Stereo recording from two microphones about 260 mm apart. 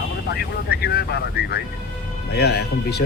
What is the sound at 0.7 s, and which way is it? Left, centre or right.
Speech, left.